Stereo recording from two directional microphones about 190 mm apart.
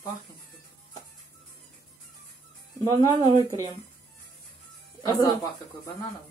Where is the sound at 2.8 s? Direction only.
25° right (ahead or behind).